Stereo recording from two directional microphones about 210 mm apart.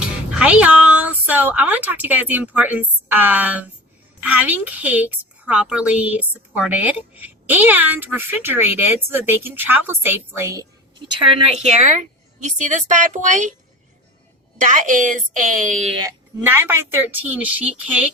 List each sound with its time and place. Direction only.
0.3 s a woman's voice: 5° right (ahead or behind)
11.3 s a woman's voice: 30° right (ahead or behind)
14.6 s a woman's voice: 40° right (ahead or behind)
16.0 s a woman's voice: 10° right (ahead or behind)